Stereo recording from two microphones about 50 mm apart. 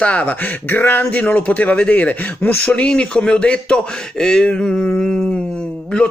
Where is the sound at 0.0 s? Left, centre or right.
Left.